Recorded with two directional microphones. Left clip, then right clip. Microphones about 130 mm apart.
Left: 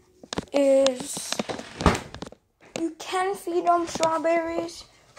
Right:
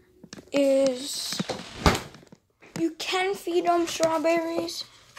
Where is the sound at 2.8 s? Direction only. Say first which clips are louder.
Right 1 dB; 25° right (ahead or behind).